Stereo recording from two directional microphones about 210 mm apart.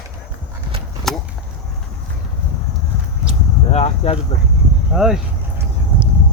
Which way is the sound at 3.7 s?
30° left (ahead or behind).